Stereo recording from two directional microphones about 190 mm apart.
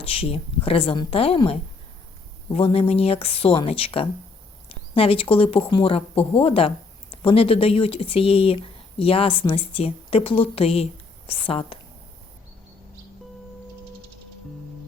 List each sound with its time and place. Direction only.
0.0 s speech: 30° left (ahead or behind)